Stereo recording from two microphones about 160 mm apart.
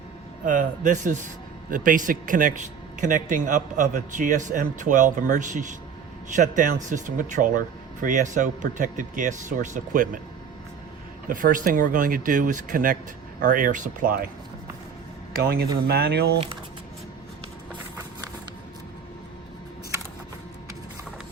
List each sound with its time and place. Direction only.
0.4 s a man's voice: 55° right (ahead or behind)
11.3 s speech: 60° right (ahead or behind)
15.4 s speech: 80° right